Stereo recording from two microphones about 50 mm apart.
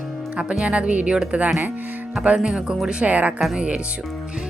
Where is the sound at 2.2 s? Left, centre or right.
Right.